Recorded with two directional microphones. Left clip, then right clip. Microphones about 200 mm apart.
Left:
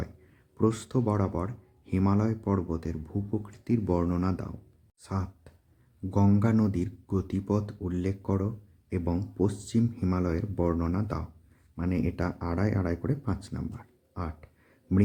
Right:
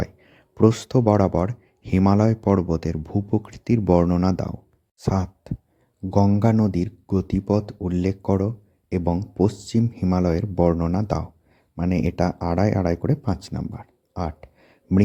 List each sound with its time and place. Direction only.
0.0 s speech: 40° right (ahead or behind)